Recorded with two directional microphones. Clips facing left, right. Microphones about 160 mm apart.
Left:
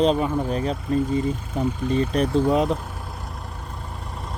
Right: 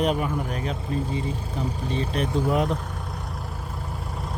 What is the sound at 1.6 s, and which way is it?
Speech, 45° left (ahead or behind).